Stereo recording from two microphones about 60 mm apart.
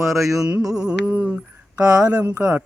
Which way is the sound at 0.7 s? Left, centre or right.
Centre.